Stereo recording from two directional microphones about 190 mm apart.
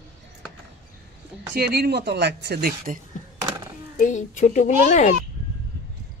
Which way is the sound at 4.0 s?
40° left (ahead or behind).